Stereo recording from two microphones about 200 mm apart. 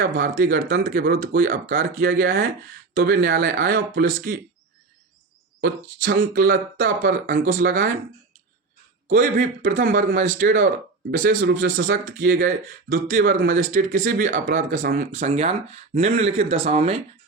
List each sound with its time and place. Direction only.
0.0 s speech: 45° right (ahead or behind)
5.5 s speech: 50° right (ahead or behind)
9.0 s speech: 40° right (ahead or behind)